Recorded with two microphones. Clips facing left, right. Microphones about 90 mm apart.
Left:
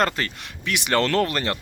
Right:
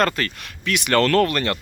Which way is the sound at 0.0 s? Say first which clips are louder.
Right 2 dB; 20° left (ahead or behind).